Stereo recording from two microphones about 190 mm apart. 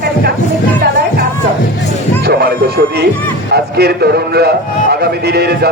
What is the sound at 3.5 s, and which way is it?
A man's voice, 55° right (ahead or behind).